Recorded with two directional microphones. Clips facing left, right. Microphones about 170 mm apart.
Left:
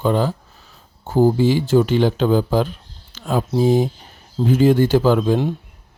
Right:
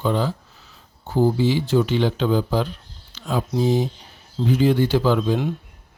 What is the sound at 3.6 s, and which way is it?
Speech, 50° left (ahead or behind).